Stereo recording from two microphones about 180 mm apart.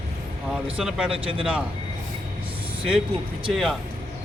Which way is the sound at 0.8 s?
5° right (ahead or behind).